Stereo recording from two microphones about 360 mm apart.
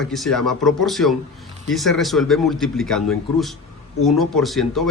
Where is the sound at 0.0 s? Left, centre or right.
Centre.